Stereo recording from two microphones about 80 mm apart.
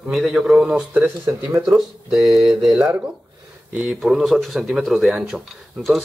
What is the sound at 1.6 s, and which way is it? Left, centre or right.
A man's voice, centre.